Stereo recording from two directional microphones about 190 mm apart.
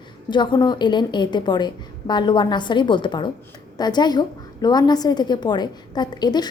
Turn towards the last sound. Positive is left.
turn(degrees=20)  # may be behind; listen again after turning